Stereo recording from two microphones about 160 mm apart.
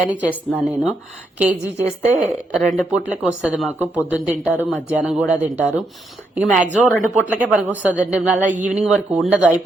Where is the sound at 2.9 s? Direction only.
10° right (ahead or behind).